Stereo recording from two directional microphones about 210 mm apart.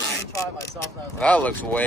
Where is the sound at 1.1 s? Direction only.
5° left (ahead or behind).